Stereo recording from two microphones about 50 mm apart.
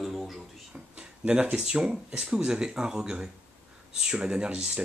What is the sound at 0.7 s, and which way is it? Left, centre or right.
Speech, right.